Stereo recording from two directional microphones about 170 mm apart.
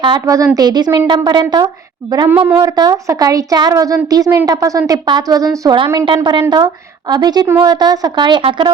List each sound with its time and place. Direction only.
0.0 s speech: 25° right (ahead or behind)
2.3 s speech: 10° right (ahead or behind)
2.6 s speech: 25° right (ahead or behind)